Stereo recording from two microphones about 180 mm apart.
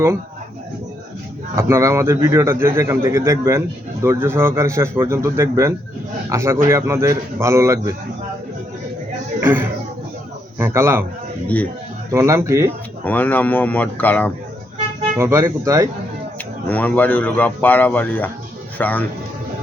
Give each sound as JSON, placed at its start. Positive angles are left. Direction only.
{"t": 1.5, "sound": "a man's voice", "side_deg": -15}
{"t": 9.4, "sound": "a man's voice", "side_deg": -10}
{"t": 11.4, "sound": "a man's voice", "side_deg": 10}
{"t": 12.1, "sound": "a man's voice", "side_deg": -15}
{"t": 13.1, "sound": "a man's voice", "side_deg": 10}
{"t": 15.2, "sound": "a man's voice", "side_deg": -15}
{"t": 16.6, "sound": "a man's voice", "side_deg": 10}